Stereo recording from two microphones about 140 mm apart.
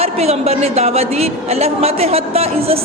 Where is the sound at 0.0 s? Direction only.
45° right (ahead or behind).